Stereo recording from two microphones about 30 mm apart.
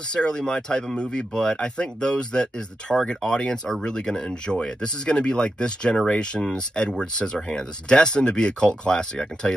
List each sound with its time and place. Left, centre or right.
0.1 s speech: left